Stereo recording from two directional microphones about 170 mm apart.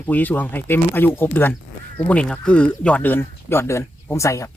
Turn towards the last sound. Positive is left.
turn(degrees=20)  # may be behind; listen again after turning